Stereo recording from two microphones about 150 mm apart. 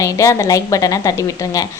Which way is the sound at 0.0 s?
20° left (ahead or behind).